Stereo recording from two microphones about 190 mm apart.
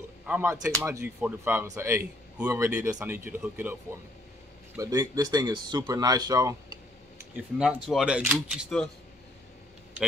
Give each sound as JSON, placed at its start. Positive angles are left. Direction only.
{"t": 0.3, "sound": "speech", "side_deg": -15}
{"t": 4.7, "sound": "speech", "side_deg": -20}
{"t": 7.3, "sound": "speech", "side_deg": -5}